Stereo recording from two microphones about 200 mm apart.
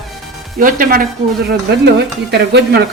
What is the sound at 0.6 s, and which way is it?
Speech, 45° right (ahead or behind).